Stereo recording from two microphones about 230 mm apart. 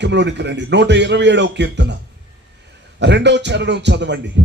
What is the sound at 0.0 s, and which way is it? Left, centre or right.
A man's voice, right.